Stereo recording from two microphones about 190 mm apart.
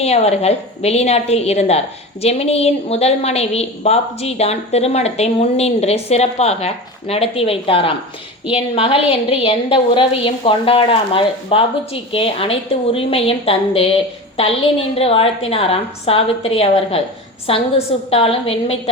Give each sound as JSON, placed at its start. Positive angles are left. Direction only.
{"t": 0.0, "sound": "a woman's voice", "side_deg": 35}